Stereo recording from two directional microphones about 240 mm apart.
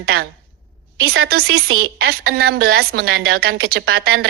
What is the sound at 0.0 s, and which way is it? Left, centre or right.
A woman's voice, right.